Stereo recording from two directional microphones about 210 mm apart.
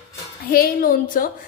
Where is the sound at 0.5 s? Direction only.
45° left (ahead or behind).